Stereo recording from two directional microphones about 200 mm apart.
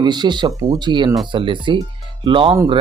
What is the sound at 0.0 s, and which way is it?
Speech, 20° right (ahead or behind).